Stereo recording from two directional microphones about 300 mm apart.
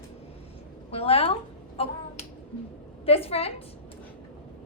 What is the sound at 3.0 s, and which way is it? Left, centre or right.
Speech, centre.